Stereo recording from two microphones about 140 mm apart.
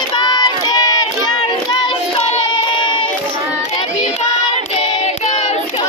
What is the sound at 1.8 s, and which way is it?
Child singing, 40° left (ahead or behind).